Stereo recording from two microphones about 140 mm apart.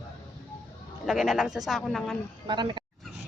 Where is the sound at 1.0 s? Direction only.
Centre (ahead or behind).